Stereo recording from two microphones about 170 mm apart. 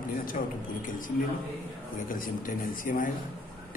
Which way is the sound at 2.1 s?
55° left (ahead or behind).